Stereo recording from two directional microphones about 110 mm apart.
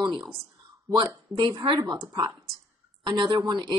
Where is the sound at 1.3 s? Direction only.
40° right (ahead or behind).